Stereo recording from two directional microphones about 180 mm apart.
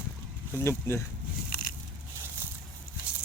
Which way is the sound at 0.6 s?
15° left (ahead or behind).